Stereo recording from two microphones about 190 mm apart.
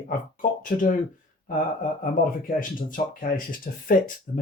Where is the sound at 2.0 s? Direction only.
45° left (ahead or behind).